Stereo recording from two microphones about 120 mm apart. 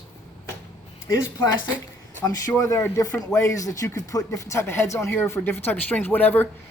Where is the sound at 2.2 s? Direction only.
30° left (ahead or behind).